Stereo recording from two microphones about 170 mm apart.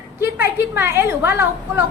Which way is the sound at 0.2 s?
15° right (ahead or behind).